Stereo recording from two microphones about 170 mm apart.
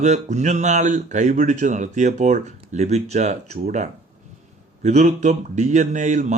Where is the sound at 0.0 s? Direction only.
45° right (ahead or behind).